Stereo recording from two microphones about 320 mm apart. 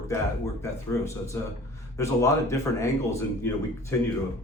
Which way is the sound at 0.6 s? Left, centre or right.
Centre.